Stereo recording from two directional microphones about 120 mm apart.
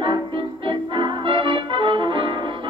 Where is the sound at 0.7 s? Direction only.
40° right (ahead or behind).